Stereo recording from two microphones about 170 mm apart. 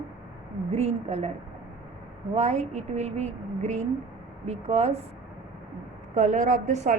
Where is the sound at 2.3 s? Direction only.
40° right (ahead or behind).